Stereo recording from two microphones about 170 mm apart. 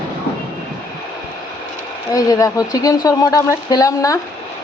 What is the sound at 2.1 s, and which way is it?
Speech, 20° left (ahead or behind).